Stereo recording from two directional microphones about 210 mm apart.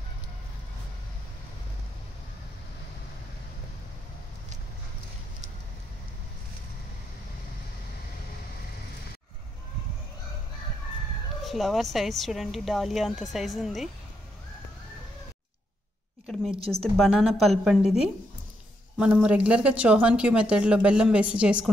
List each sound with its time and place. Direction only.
11.4 s speech: centre (ahead or behind)
16.5 s a woman's voice: 25° right (ahead or behind)
16.9 s speech: centre (ahead or behind)